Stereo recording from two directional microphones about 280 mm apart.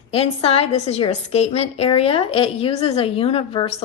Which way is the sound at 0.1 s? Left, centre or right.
Left.